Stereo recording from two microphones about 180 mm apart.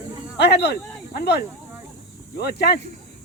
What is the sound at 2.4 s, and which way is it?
Speech, 65° left (ahead or behind).